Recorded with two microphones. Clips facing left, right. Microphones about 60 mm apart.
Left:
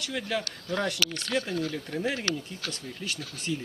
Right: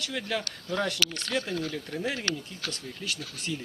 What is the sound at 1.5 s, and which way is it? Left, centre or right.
Speech, centre.